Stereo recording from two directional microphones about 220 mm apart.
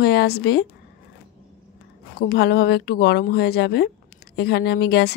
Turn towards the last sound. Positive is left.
turn(degrees=50)  # may be behind; listen again after turning